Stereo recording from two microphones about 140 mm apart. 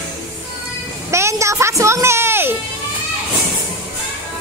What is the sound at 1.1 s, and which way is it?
Music, 20° right (ahead or behind).